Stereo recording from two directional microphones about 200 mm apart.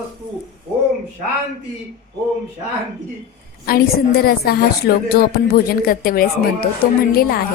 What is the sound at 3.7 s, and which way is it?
A woman's voice, 50° left (ahead or behind).